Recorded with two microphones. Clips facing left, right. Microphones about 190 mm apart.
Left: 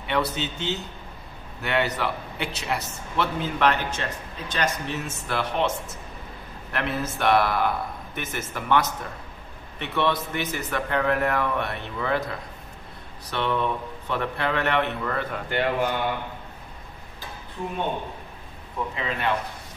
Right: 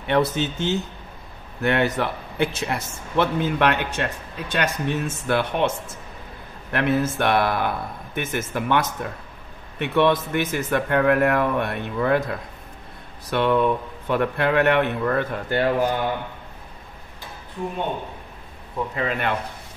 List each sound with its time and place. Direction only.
0.1 s a man's voice: 45° right (ahead or behind)
6.7 s a man's voice: 55° right (ahead or behind)
18.9 s a man's voice: 55° right (ahead or behind)